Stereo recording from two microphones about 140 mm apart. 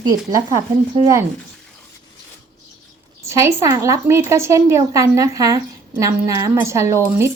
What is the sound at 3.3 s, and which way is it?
A woman's voice, 20° right (ahead or behind).